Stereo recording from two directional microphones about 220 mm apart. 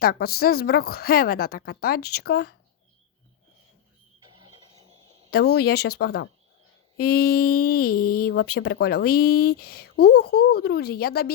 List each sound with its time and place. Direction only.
0.0 s a woman's voice: 45° left (ahead or behind)
5.3 s a woman's voice: 45° left (ahead or behind)